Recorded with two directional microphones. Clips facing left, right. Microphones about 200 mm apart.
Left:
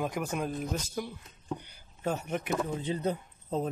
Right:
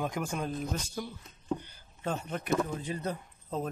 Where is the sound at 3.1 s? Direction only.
25° left (ahead or behind).